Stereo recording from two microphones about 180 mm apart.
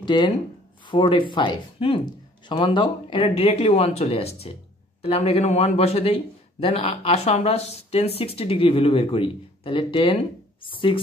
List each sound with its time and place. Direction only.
0.0 s speech: 25° left (ahead or behind)